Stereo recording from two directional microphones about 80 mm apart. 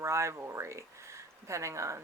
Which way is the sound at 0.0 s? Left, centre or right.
Right.